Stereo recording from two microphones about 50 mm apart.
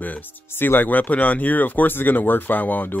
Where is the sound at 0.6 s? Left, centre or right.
Left.